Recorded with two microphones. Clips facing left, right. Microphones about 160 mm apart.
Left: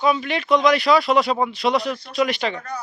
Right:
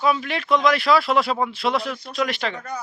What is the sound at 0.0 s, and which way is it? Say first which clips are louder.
A man's voice: left 2 dB; centre (ahead or behind).